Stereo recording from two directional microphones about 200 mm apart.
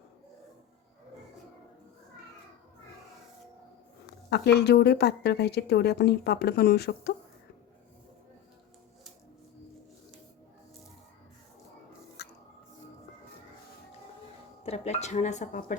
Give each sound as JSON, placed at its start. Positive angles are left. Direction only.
{"t": 4.3, "sound": "speech", "side_deg": 55}
{"t": 12.2, "sound": "drip", "side_deg": 55}
{"t": 14.6, "sound": "speech", "side_deg": 30}